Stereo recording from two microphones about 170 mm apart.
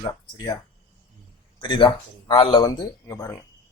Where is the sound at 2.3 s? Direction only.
35° left (ahead or behind).